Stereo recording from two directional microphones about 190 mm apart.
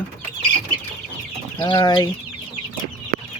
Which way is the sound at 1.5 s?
25° left (ahead or behind).